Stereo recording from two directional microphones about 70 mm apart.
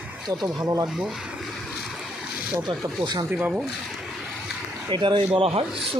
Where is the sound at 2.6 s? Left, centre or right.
Right.